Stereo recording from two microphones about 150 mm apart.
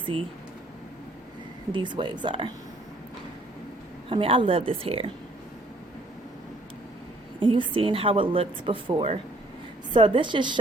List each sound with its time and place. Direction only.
1.7 s a woman's voice: 30° right (ahead or behind)
4.1 s a woman's voice: 35° right (ahead or behind)
7.3 s a woman's voice: 35° right (ahead or behind)